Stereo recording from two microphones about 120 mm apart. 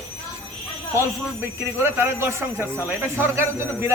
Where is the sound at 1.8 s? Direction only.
20° right (ahead or behind).